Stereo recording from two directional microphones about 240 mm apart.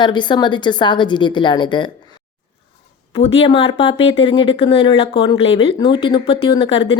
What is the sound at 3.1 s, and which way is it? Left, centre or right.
Speech, left.